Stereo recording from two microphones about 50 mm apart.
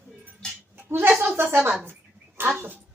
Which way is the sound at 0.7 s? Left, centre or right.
Right.